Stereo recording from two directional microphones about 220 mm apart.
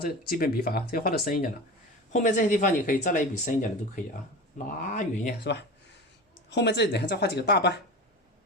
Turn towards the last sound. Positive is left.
turn(degrees=50)  # may be behind; listen again after turning